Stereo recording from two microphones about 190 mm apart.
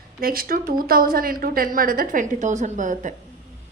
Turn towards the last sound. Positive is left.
turn(degrees=-40)  # may be behind; listen again after turning